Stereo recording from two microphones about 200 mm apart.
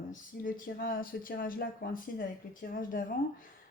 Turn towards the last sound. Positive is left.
turn(degrees=45)  # may be behind; listen again after turning